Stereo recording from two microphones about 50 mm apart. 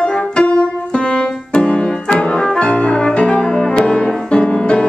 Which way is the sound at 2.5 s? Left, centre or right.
Left.